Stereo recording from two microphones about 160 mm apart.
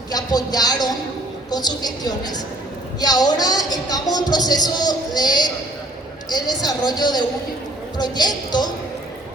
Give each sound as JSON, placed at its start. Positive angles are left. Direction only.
{"t": 0.1, "sound": "speech", "side_deg": 25}